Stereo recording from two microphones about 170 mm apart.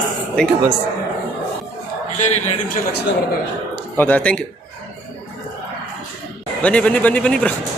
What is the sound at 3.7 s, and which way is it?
Speech, 10° left (ahead or behind).